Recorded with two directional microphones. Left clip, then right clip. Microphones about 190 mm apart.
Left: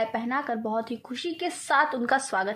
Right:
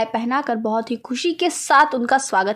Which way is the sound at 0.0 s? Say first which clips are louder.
Right 7 dB; 25° right (ahead or behind).